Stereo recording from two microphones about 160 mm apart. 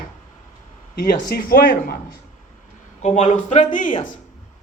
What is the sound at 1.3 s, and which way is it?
Speech, 70° left (ahead or behind).